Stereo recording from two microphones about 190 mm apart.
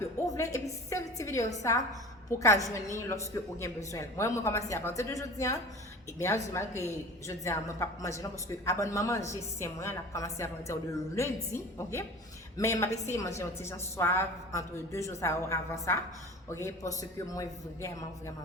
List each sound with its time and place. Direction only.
0.3 s a woman's voice: 15° left (ahead or behind)